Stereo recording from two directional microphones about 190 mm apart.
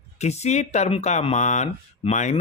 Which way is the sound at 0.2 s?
35° left (ahead or behind).